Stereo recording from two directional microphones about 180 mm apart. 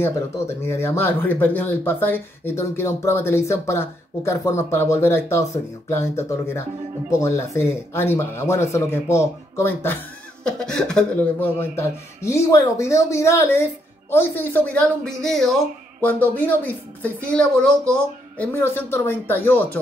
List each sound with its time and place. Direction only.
0.0 s speech: 15° left (ahead or behind)
12.3 s speech: 15° left (ahead or behind)